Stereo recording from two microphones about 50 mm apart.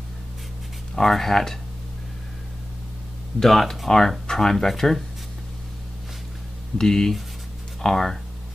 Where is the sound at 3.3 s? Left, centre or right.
Centre.